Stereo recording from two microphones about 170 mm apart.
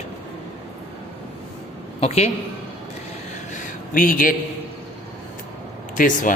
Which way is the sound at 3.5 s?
50° left (ahead or behind).